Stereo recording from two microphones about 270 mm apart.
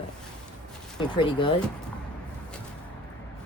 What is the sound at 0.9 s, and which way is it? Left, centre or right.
Speech, centre.